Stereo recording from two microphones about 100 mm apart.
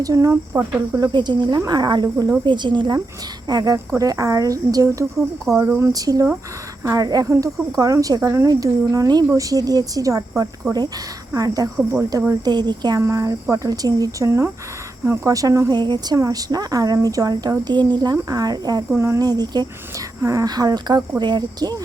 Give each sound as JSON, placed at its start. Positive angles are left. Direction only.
{"t": 0.0, "sound": "a woman's voice", "side_deg": -35}
{"t": 5.9, "sound": "a woman's voice", "side_deg": -35}
{"t": 11.8, "sound": "speech", "side_deg": -25}
{"t": 12.5, "sound": "speech", "side_deg": -45}
{"t": 13.0, "sound": "a woman's voice", "side_deg": -30}
{"t": 14.3, "sound": "a woman's voice", "side_deg": -25}
{"t": 15.7, "sound": "speech", "side_deg": -45}
{"t": 16.1, "sound": "a woman's voice", "side_deg": -35}
{"t": 18.9, "sound": "speech", "side_deg": -25}
{"t": 19.2, "sound": "a woman's voice", "side_deg": -40}